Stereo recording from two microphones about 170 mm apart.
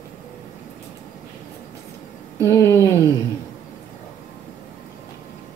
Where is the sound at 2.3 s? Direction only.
15° left (ahead or behind).